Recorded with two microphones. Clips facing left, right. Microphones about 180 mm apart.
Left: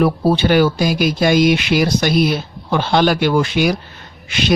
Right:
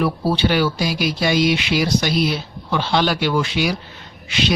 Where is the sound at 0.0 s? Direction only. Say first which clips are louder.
Left 4 dB; 50° left (ahead or behind).